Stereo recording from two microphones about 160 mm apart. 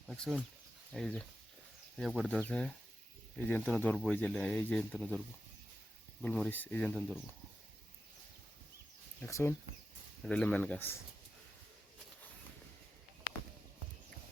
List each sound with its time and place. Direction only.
0.1 s speech: centre (ahead or behind)
6.2 s speech: 10° left (ahead or behind)
9.2 s speech: 15° left (ahead or behind)
10.2 s speech: 5° left (ahead or behind)